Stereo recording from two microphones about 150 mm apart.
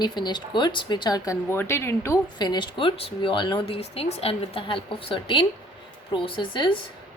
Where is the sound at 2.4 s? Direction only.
30° left (ahead or behind).